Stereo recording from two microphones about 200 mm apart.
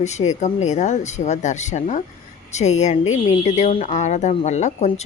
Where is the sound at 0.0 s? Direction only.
35° left (ahead or behind).